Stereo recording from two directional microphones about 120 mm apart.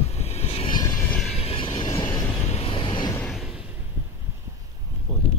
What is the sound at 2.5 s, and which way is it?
Vehicle, 55° left (ahead or behind).